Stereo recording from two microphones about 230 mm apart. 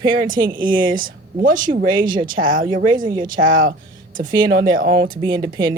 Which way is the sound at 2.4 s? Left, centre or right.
Right.